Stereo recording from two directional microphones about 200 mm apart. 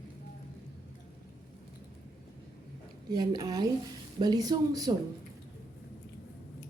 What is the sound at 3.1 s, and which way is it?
Speech, 20° right (ahead or behind).